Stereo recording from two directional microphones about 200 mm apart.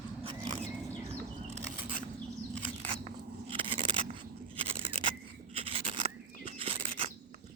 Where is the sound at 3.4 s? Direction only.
25° right (ahead or behind).